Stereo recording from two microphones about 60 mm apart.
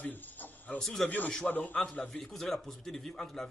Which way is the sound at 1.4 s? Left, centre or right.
Left.